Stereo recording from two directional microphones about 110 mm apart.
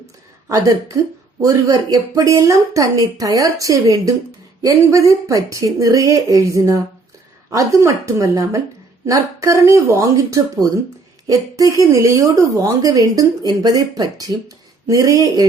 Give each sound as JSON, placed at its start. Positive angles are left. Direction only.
{"t": 0.4, "sound": "a woman's voice", "side_deg": -30}